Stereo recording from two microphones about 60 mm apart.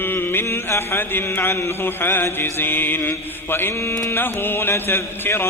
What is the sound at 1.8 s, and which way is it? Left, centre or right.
Mantra, left.